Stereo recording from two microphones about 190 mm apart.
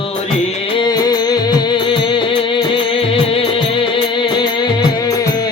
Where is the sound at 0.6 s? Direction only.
25° left (ahead or behind).